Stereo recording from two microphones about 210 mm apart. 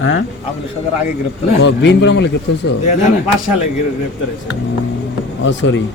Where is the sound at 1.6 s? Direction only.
55° left (ahead or behind).